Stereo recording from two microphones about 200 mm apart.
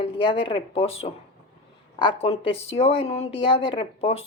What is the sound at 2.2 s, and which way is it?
Speech, 30° left (ahead or behind).